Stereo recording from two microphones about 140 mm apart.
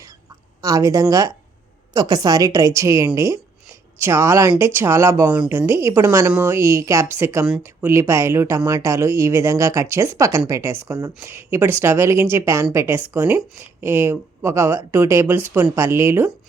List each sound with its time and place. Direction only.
0.6 s speech: 25° right (ahead or behind)